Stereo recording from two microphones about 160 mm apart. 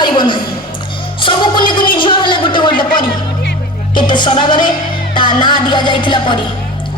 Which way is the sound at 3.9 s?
30° left (ahead or behind).